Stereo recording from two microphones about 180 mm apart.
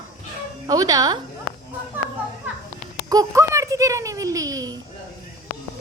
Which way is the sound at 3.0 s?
20° right (ahead or behind).